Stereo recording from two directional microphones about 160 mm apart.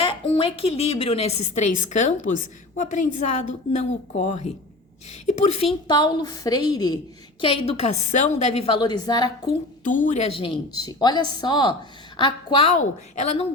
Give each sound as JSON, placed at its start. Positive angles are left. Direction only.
{"t": 0.0, "sound": "a woman's voice", "side_deg": 35}
{"t": 5.9, "sound": "a woman's voice", "side_deg": 25}
{"t": 7.4, "sound": "a woman's voice", "side_deg": 35}
{"t": 9.8, "sound": "a woman's voice", "side_deg": 55}
{"t": 10.7, "sound": "a woman's voice", "side_deg": 25}
{"t": 12.7, "sound": "a woman's voice", "side_deg": 50}